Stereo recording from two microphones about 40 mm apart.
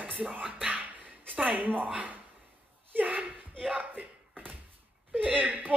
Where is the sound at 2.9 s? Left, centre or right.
Right.